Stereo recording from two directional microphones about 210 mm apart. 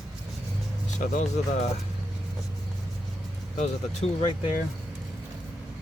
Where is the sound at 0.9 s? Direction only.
35° left (ahead or behind).